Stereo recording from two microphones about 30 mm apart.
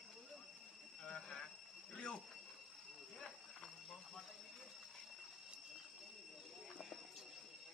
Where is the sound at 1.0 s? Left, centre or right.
Left.